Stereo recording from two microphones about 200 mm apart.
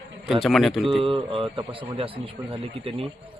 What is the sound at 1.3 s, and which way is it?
Speech, 25° right (ahead or behind).